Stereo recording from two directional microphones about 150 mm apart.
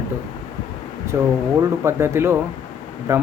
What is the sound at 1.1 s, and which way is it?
Speech, 15° right (ahead or behind).